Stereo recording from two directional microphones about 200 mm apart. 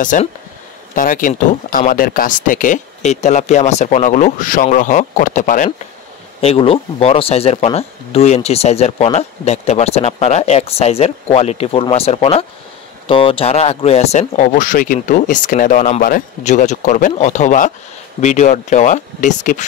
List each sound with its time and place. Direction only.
0.0 s speech: 40° left (ahead or behind)